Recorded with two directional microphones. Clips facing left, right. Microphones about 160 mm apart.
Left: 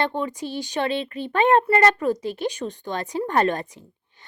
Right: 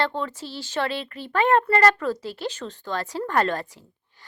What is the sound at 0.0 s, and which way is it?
A woman's voice, 15° left (ahead or behind).